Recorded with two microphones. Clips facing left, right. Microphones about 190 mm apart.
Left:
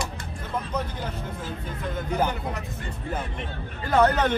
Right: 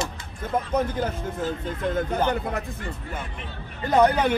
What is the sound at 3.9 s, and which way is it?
Speech, 15° right (ahead or behind).